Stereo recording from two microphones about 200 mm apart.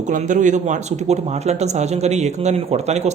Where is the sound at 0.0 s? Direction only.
40° right (ahead or behind).